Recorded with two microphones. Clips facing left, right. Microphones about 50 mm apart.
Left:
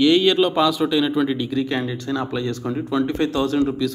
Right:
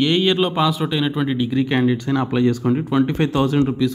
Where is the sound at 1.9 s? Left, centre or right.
Right.